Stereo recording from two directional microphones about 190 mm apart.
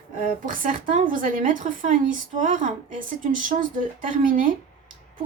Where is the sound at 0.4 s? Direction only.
45° right (ahead or behind).